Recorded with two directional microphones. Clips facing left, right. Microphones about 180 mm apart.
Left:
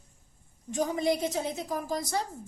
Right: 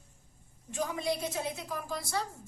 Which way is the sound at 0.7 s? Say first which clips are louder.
Left 5 dB; 40° left (ahead or behind).